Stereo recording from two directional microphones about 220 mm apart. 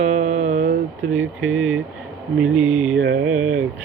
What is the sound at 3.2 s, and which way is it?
Speech, 5° right (ahead or behind).